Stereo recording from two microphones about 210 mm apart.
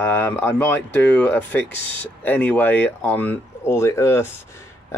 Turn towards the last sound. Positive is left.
turn(degrees=15)  # may be behind; listen again after turning